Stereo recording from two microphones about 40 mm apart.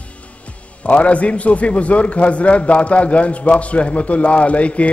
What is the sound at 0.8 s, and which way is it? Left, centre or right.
A man's voice, left.